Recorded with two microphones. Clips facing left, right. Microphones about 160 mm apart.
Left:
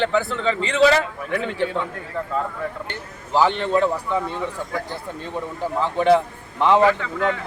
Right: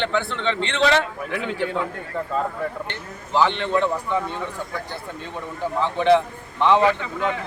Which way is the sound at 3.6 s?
5° left (ahead or behind).